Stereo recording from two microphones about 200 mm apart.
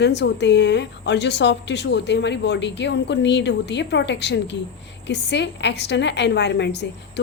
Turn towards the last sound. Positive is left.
turn(degrees=60)  # may be behind; listen again after turning